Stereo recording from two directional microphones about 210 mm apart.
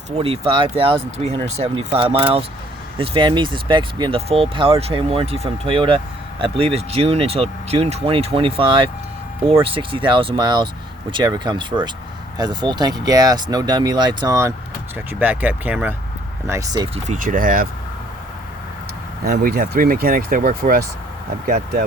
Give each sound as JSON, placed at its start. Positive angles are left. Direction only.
{"t": 0.2, "sound": "speech", "side_deg": -25}
{"t": 17.1, "sound": "speech", "side_deg": -40}
{"t": 19.2, "sound": "speech", "side_deg": -45}